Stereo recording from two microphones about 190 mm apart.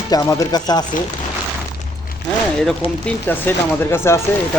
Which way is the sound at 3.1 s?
10° left (ahead or behind).